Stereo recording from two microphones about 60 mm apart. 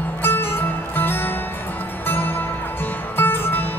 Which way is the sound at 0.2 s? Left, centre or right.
Left.